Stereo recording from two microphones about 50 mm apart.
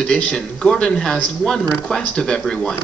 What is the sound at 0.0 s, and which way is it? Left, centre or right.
Speech, centre.